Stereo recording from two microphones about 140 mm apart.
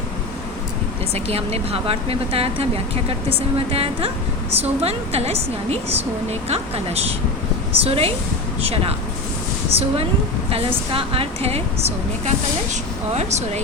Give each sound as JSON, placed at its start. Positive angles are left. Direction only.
{"t": 1.1, "sound": "a woman's voice", "side_deg": -45}